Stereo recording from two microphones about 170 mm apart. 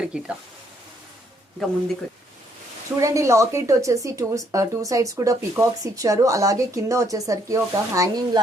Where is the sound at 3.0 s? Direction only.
20° right (ahead or behind).